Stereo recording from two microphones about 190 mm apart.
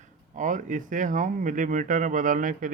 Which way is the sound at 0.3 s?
40° right (ahead or behind).